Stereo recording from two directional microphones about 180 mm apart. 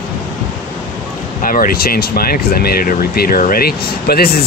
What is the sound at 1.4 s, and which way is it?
Speech, 50° left (ahead or behind).